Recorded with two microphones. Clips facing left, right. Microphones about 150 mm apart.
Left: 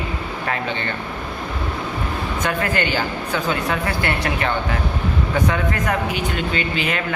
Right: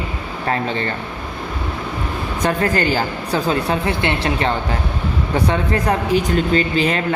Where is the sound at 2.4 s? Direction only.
35° right (ahead or behind).